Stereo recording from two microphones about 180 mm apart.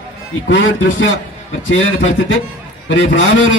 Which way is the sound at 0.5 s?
90° left.